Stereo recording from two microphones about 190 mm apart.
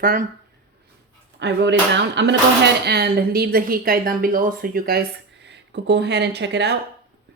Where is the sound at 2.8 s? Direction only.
55° right (ahead or behind).